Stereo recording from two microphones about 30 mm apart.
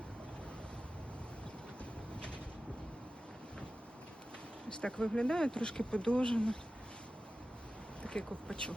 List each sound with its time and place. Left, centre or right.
4.7 s speech: left
8.0 s a sound: left
8.4 s speech: left